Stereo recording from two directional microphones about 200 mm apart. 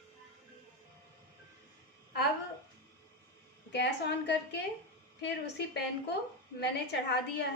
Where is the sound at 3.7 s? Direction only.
60° left (ahead or behind).